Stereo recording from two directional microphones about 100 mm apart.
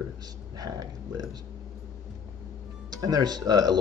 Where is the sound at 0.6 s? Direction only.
45° right (ahead or behind).